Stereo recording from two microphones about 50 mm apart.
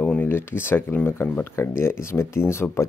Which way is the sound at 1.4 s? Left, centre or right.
Left.